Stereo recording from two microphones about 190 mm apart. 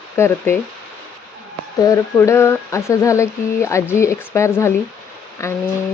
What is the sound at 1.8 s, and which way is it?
Speech, 15° left (ahead or behind).